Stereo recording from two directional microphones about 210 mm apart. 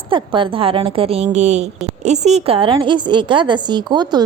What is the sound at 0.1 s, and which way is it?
A woman's voice, 25° right (ahead or behind).